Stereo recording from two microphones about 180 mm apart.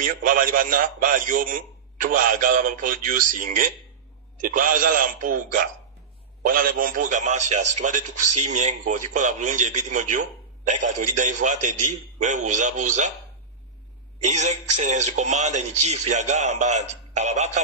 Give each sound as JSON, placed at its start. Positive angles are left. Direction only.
{"t": 0.0, "sound": "a man's voice", "side_deg": -50}
{"t": 14.2, "sound": "a man's voice", "side_deg": -40}